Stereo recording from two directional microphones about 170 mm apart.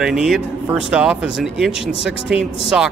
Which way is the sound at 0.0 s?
5° right (ahead or behind).